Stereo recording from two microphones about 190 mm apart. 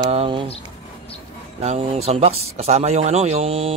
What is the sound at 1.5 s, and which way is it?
Speech, 35° right (ahead or behind).